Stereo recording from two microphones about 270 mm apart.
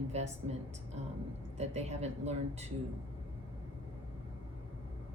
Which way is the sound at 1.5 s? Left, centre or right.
Right.